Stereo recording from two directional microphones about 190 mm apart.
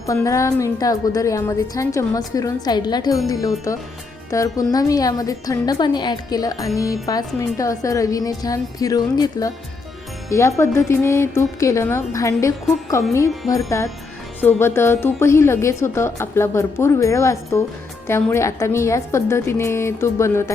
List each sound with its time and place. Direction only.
0.0 s a woman's voice: 15° left (ahead or behind)